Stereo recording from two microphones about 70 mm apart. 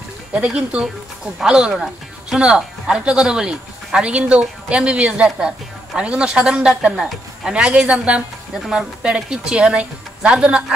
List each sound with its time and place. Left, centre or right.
0.3 s speech: centre